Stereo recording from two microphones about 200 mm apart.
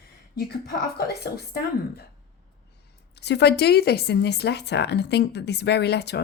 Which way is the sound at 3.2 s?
55° left (ahead or behind).